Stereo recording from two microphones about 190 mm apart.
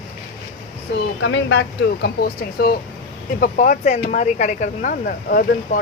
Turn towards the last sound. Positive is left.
turn(degrees=45)  # may be behind; listen again after turning